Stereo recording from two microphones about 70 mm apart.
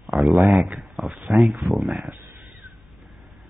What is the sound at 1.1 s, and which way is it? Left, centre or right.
Speech, centre.